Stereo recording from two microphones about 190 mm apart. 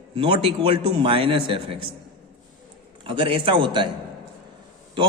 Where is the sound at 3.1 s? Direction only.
25° right (ahead or behind).